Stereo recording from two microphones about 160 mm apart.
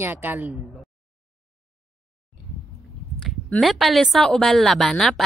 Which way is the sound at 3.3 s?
Centre (ahead or behind).